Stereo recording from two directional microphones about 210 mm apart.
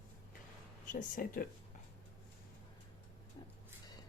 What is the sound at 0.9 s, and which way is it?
Speech, 40° left (ahead or behind).